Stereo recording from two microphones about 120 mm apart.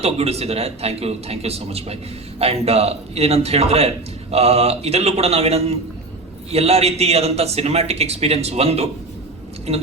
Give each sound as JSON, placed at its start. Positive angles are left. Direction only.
{"t": 0.0, "sound": "a man's voice", "side_deg": -60}